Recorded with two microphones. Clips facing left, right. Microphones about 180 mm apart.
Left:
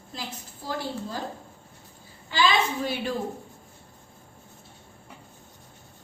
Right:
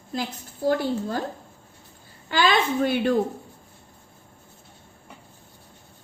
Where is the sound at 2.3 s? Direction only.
55° right (ahead or behind).